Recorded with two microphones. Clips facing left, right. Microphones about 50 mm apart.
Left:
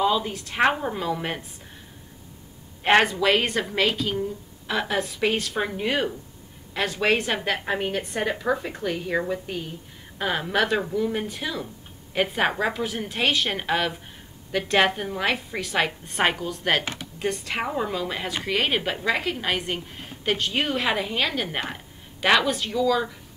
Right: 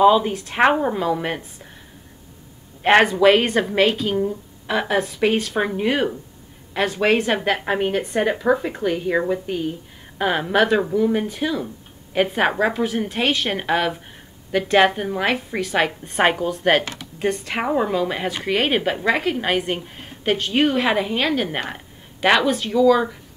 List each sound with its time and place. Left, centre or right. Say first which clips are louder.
0.0 s a woman's voice: right 8 dB; right; by 1.4 s centre
2.8 s a woman's voice: right 5 dB; centre